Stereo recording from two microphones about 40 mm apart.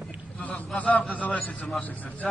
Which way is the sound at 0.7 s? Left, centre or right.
Left.